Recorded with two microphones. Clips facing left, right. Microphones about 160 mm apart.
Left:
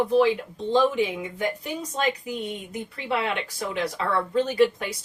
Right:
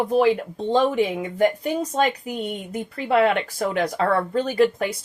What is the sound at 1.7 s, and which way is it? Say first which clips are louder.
Speech: right 5 dB; 50° right (ahead or behind).